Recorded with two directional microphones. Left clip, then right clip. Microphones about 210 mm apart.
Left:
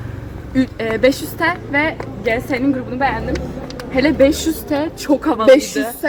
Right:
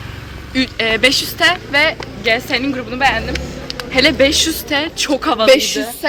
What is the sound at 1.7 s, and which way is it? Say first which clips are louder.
Speech: right 4 dB; 25° right (ahead or behind).